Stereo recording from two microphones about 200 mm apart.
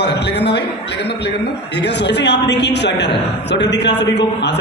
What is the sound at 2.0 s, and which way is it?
A man's voice, 60° left (ahead or behind).